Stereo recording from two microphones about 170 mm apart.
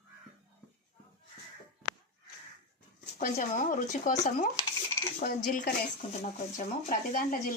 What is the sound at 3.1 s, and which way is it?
Speech, 50° left (ahead or behind).